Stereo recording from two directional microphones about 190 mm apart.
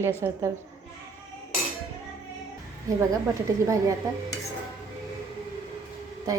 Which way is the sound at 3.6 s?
15° right (ahead or behind).